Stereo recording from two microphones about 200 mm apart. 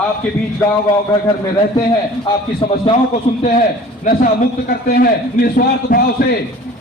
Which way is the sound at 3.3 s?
35° left (ahead or behind).